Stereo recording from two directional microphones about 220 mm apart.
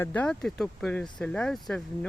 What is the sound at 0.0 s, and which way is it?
Speech, 5° left (ahead or behind).